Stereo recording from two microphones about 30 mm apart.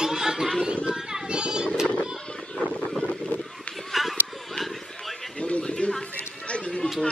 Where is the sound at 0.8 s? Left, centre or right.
Right.